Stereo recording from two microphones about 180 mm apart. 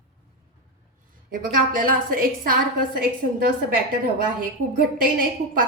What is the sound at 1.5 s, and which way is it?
A woman's voice, 55° right (ahead or behind).